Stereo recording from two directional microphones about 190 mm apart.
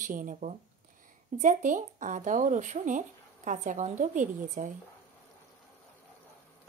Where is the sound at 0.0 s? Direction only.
45° right (ahead or behind).